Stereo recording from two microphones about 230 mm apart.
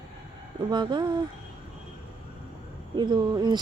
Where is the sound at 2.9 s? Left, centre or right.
Centre.